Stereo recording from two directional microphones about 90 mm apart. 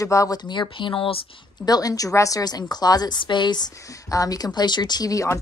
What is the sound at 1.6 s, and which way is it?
A woman's voice, 45° left (ahead or behind).